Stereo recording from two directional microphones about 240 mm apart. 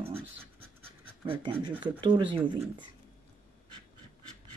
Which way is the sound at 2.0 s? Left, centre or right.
Right.